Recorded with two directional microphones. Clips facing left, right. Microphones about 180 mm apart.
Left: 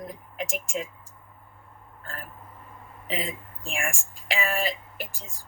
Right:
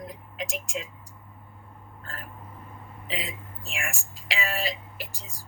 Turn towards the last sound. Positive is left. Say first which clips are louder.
# left 3 dB
turn(degrees=50)  # may be behind; listen again after turning